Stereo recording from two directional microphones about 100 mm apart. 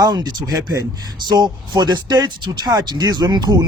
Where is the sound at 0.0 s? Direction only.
45° right (ahead or behind).